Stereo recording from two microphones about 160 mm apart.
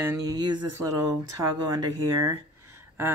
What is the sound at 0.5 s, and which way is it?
Speech, 25° right (ahead or behind).